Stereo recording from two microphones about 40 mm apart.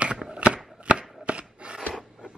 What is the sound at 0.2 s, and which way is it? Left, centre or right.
Chopping, right.